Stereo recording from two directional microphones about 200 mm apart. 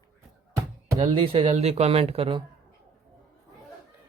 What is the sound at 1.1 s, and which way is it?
Speech, 30° right (ahead or behind).